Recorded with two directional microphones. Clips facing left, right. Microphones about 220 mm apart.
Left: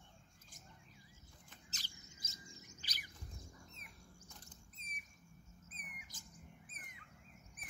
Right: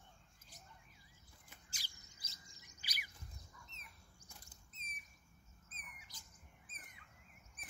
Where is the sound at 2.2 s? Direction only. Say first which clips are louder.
Left 7 dB; 45° left (ahead or behind).